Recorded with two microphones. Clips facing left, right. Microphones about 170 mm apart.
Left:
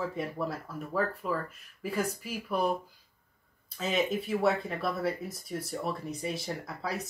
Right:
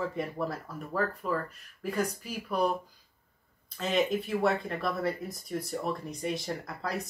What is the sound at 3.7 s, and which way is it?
Speech, 5° left (ahead or behind).